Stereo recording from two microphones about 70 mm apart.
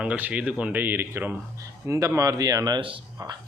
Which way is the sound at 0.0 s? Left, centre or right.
Centre.